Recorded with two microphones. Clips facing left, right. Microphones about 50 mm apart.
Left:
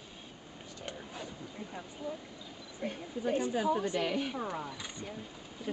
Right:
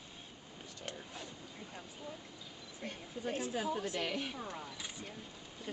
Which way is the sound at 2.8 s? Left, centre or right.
Centre.